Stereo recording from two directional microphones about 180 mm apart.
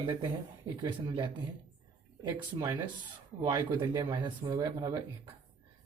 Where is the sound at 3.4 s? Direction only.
20° right (ahead or behind).